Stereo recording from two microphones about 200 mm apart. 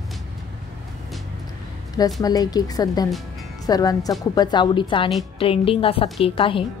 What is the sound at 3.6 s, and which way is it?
A woman's voice, 20° left (ahead or behind).